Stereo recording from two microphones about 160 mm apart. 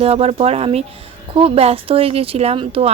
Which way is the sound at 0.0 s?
40° right (ahead or behind).